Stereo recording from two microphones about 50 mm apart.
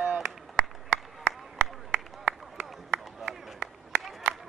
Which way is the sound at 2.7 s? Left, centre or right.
Centre.